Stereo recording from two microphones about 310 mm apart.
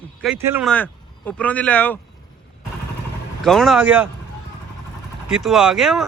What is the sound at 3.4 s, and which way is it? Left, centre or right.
Speech, centre.